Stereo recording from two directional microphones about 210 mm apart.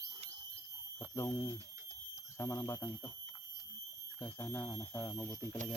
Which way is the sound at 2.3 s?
15° left (ahead or behind).